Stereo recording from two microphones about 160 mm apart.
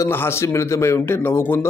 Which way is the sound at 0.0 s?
15° left (ahead or behind).